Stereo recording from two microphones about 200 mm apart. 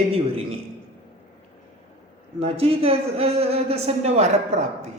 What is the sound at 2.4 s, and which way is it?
A man's voice, 30° right (ahead or behind).